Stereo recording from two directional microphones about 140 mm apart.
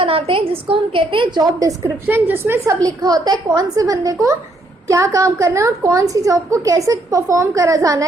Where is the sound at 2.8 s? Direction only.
25° right (ahead or behind).